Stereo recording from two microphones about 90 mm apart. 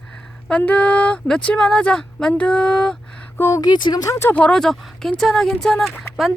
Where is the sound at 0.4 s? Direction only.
15° left (ahead or behind).